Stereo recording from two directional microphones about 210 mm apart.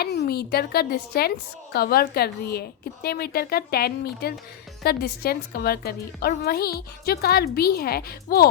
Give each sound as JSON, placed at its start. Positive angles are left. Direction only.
{"t": 0.0, "sound": "a woman's voice", "side_deg": 50}